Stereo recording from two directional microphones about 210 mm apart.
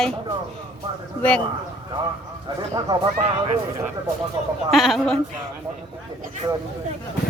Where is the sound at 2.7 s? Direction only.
20° right (ahead or behind).